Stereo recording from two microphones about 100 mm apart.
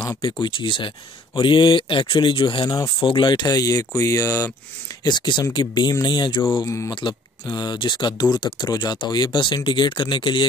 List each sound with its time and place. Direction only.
0.2 s speech: 55° left (ahead or behind); by 4.5 s 30° left (ahead or behind)
5.0 s speech: 45° left (ahead or behind)
6.6 s speech: 30° left (ahead or behind)
6.9 s speech: 50° left (ahead or behind)